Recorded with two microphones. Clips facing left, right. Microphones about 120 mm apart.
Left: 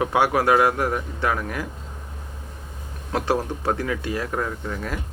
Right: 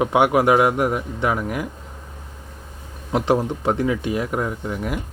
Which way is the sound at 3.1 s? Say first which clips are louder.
Right 4 dB; 15° right (ahead or behind).